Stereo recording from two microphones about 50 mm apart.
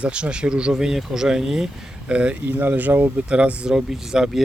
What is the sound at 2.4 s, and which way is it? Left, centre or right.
Speech, right.